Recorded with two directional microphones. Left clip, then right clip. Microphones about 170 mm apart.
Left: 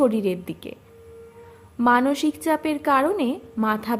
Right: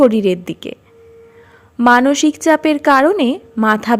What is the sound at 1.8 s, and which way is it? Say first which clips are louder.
A woman's voice: right 8 dB; 40° right (ahead or behind).